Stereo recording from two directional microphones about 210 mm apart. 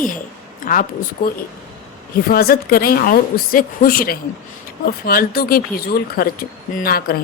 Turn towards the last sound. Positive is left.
turn(degrees=45)  # may be behind; listen again after turning